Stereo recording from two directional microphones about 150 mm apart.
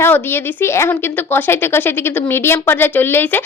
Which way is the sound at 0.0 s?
15° left (ahead or behind).